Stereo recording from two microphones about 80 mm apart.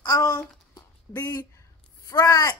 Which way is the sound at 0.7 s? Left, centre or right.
Left.